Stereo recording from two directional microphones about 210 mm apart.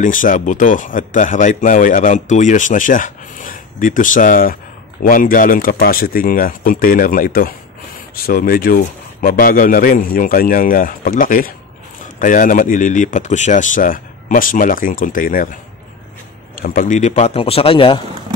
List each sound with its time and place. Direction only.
0.0 s a man's voice: 40° left (ahead or behind)
16.5 s a man's voice: 40° left (ahead or behind); by 18.0 s 25° left (ahead or behind)